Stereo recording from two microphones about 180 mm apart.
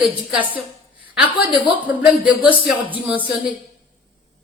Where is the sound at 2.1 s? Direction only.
5° right (ahead or behind).